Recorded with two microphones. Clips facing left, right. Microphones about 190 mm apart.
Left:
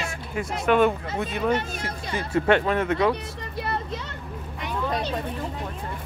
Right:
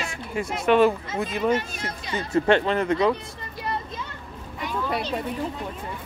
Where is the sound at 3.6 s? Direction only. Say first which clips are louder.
Left 1 dB; 70° left (ahead or behind).